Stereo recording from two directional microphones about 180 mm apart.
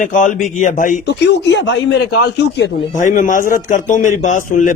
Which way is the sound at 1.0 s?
80° left.